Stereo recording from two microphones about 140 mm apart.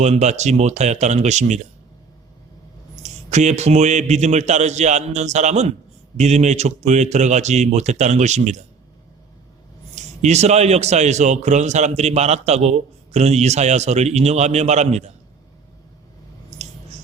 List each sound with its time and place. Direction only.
0.0 s a man's voice: 55° right (ahead or behind)
3.0 s a man's voice: 55° right (ahead or behind)
9.9 s a man's voice: 55° right (ahead or behind)